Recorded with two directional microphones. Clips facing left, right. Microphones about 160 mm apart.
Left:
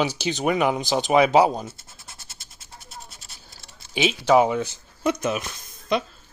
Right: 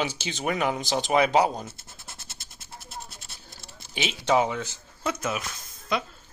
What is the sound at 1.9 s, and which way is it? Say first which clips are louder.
Bleat: right 1 dB; 25° right (ahead or behind).